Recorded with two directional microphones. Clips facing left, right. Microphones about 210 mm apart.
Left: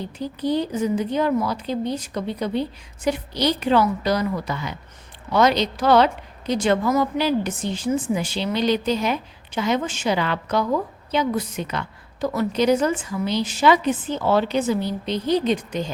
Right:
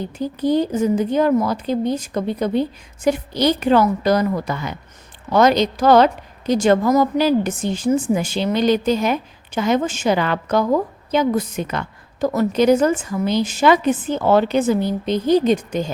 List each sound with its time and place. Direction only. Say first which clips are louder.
0.2 s a woman's voice: right 5 dB; 45° right (ahead or behind)